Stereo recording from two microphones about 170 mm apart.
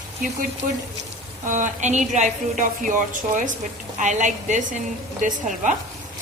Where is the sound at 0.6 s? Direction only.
50° right (ahead or behind).